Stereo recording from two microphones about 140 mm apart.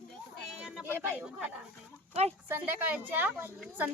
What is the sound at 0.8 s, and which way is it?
Speech, 15° right (ahead or behind).